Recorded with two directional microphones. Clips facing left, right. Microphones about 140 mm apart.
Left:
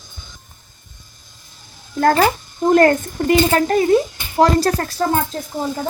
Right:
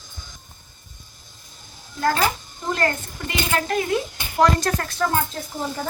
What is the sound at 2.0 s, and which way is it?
A child's voice, 50° left (ahead or behind).